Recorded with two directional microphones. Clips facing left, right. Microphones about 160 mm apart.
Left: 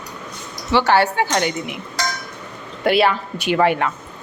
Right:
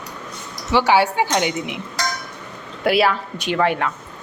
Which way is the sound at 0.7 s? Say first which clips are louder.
Even; 10° right (ahead or behind).